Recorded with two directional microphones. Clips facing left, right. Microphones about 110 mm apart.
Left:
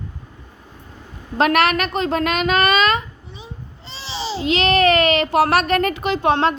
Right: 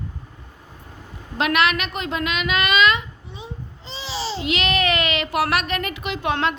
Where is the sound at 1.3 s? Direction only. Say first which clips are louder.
Left 4 dB; 40° left (ahead or behind).